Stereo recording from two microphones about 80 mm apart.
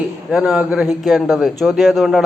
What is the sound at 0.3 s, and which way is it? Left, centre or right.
Speech, centre.